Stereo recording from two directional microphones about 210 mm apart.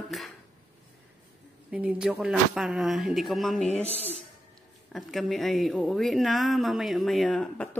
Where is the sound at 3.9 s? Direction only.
30° left (ahead or behind).